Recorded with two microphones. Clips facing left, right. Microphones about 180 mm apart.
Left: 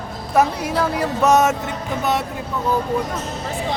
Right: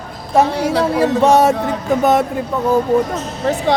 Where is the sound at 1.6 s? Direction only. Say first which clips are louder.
Right 8 dB; 50° right (ahead or behind).